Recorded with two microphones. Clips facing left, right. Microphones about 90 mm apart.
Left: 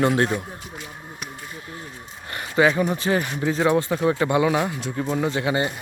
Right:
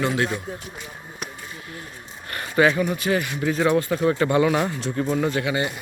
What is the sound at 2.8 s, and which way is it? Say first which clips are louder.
Speech: left 1 dB; 30° left (ahead or behind).